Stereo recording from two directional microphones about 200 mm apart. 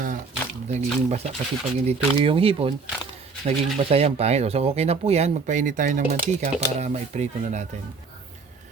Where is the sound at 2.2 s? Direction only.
30° right (ahead or behind).